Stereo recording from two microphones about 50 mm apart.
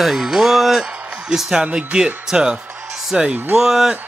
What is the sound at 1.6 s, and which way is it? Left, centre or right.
Speech, centre.